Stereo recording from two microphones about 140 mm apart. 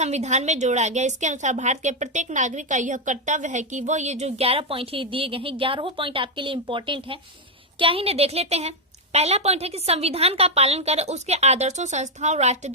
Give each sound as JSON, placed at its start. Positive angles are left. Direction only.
{"t": 0.0, "sound": "a woman's voice", "side_deg": -55}